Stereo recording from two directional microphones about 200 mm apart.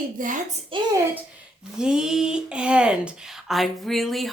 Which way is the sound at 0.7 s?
25° right (ahead or behind).